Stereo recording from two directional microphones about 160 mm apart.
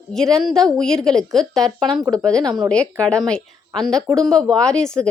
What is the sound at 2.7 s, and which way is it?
Speech, 5° left (ahead or behind).